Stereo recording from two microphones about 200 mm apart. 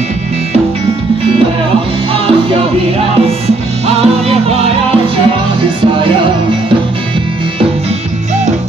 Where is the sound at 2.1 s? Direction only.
30° right (ahead or behind).